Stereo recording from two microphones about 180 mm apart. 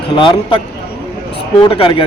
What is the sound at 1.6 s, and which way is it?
Speech, 25° left (ahead or behind).